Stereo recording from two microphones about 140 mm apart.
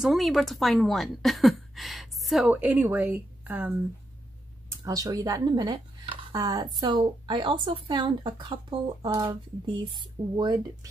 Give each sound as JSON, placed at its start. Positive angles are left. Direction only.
{"t": 0.0, "sound": "a woman's voice", "side_deg": 0}
{"t": 2.5, "sound": "speech", "side_deg": -10}
{"t": 4.6, "sound": "speech", "side_deg": -25}